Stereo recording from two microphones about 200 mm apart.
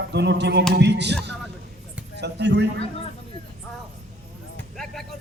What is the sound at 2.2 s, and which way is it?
Speech, 60° right (ahead or behind).